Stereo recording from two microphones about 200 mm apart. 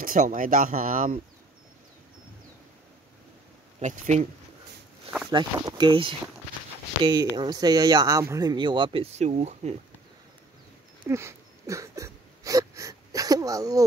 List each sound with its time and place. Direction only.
0.0 s speech: 45° right (ahead or behind)
3.8 s speech: 40° right (ahead or behind)
5.3 s speech: 20° right (ahead or behind)
11.1 s a sound: 15° right (ahead or behind)